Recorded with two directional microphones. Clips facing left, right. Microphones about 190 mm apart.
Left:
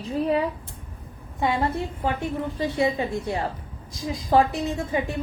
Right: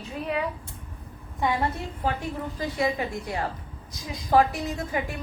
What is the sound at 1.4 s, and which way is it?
A woman's voice, 25° left (ahead or behind).